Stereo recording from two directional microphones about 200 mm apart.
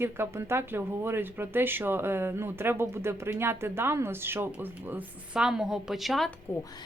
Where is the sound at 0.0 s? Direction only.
10° right (ahead or behind).